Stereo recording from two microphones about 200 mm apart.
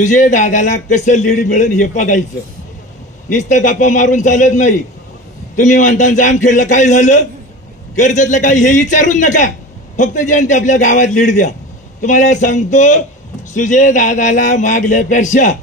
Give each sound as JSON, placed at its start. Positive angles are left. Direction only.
{"t": 0.0, "sound": "a man's voice", "side_deg": 40}
{"t": 3.3, "sound": "a man's voice", "side_deg": 40}